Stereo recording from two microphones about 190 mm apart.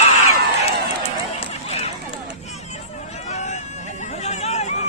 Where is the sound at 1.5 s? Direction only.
35° left (ahead or behind).